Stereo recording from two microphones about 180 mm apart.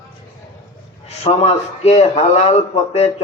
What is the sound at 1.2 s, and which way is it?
A man's voice, 35° left (ahead or behind).